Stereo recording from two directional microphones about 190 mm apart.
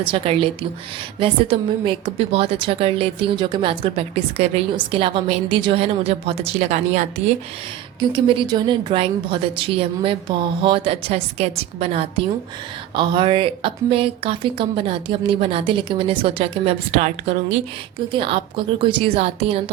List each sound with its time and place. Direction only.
0.0 s a woman's voice: 25° right (ahead or behind)
8.1 s a woman's voice: 25° right (ahead or behind)